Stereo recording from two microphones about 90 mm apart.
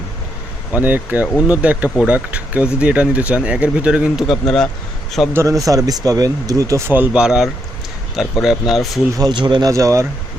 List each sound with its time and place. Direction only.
0.7 s speech: 20° right (ahead or behind)
4.2 s speech: 5° left (ahead or behind)
5.3 s speech: 35° right (ahead or behind)
6.8 s speech: 20° right (ahead or behind); by 8.9 s 5° right (ahead or behind)
9.1 s speech: 50° right (ahead or behind)
9.6 s speech: 35° right (ahead or behind)